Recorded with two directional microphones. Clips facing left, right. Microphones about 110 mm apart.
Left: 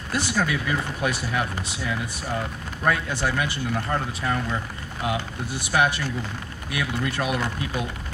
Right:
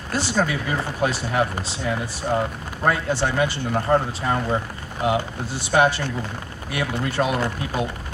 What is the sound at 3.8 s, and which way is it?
Speech, 45° right (ahead or behind).